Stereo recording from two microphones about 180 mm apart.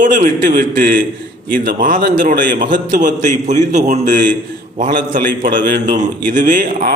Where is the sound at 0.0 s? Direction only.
45° right (ahead or behind).